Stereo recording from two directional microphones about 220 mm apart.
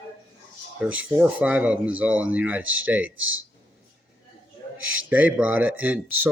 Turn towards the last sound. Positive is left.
turn(degrees=-5)  # may be behind; listen again after turning